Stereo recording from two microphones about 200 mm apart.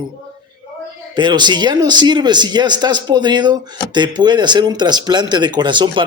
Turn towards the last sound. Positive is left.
turn(degrees=-25)  # may be behind; listen again after turning